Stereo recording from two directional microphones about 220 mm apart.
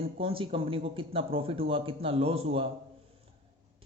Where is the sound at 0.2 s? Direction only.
25° right (ahead or behind).